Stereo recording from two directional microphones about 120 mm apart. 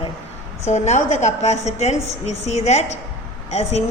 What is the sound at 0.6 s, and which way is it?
A woman's voice, 70° left (ahead or behind).